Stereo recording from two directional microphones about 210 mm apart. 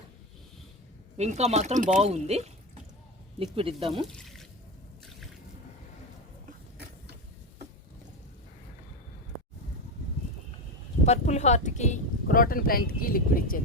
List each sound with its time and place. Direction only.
1.1 s speech: 30° right (ahead or behind)
11.0 s speech: 30° left (ahead or behind)